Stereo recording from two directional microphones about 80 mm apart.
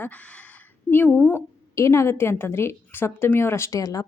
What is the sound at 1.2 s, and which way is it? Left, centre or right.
Speech, left.